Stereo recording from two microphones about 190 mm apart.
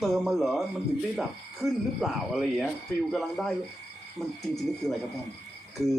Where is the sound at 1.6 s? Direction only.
Centre (ahead or behind).